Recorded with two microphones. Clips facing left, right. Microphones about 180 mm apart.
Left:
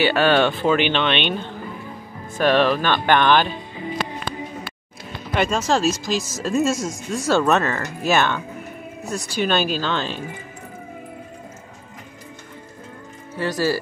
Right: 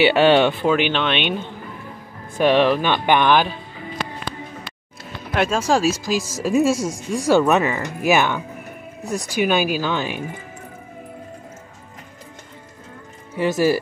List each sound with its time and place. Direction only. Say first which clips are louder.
0.0 s speech: right 3 dB; 20° right (ahead or behind)
0.7 s speech: even; 5° right (ahead or behind)
5.3 s speech: right 1 dB; 5° right (ahead or behind)
13.4 s speech: right 4 dB; 20° right (ahead or behind)